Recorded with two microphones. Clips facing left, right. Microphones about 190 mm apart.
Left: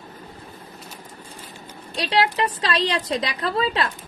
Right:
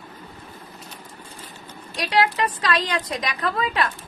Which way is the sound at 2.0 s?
25° left (ahead or behind).